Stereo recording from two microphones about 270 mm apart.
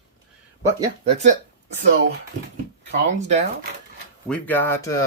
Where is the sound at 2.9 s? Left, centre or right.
Right.